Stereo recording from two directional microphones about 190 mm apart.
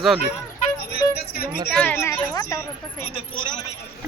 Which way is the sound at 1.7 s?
5° left (ahead or behind).